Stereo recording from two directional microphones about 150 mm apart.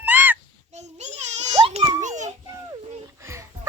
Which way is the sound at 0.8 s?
50° right (ahead or behind).